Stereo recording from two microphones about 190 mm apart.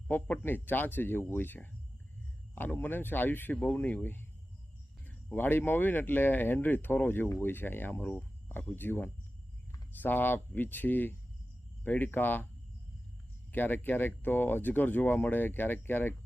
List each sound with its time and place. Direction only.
0.1 s speech: 10° left (ahead or behind)
13.5 s speech: 10° left (ahead or behind)